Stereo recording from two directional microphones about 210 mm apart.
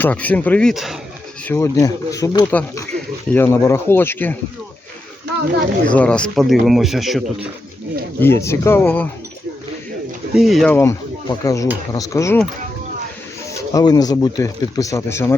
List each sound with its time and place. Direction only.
0.0 s speech: 5° left (ahead or behind)
1.5 s speech: 15° left (ahead or behind)
5.9 s speech: 5° left (ahead or behind)
8.2 s speech: 10° left (ahead or behind)
10.3 s speech: centre (ahead or behind)
10.8 s speech: 15° left (ahead or behind)
13.6 s speech: 15° left (ahead or behind)